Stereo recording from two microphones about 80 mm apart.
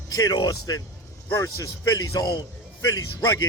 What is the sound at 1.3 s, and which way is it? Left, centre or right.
Speech, left.